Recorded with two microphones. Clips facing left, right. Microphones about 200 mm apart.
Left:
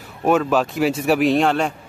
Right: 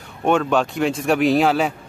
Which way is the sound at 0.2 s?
5° left (ahead or behind).